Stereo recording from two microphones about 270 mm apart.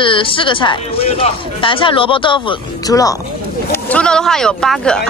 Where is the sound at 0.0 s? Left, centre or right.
Centre.